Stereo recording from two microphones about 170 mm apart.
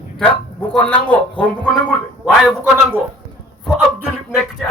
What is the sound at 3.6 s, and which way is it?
A man's voice, 5° left (ahead or behind).